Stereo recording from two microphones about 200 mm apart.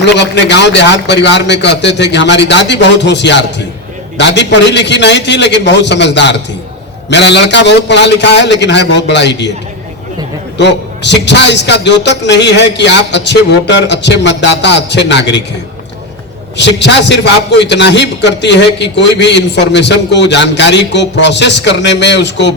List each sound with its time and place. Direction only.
0.0 s a man's voice: 60° left (ahead or behind)
10.6 s a man's voice: 60° left (ahead or behind)
16.6 s a man's voice: 60° left (ahead or behind)